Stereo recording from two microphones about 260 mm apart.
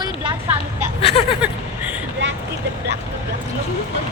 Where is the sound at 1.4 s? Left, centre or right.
Centre.